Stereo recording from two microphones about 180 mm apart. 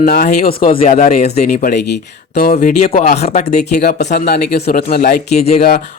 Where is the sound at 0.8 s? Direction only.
45° left (ahead or behind).